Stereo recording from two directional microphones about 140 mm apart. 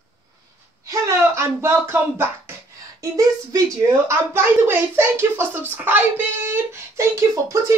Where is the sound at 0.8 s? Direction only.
20° right (ahead or behind).